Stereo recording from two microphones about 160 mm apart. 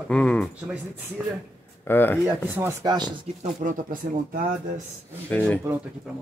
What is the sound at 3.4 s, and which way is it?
Speech, 55° right (ahead or behind).